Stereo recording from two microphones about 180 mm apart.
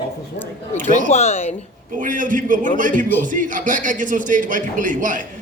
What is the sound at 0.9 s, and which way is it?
Speech, 40° left (ahead or behind).